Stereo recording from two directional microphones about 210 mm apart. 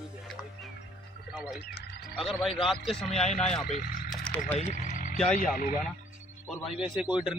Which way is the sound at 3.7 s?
40° left (ahead or behind).